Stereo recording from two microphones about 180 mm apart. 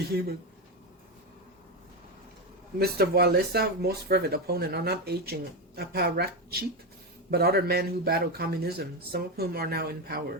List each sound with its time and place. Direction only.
0.1 s speech: 60° right (ahead or behind)
2.7 s speech: 60° right (ahead or behind)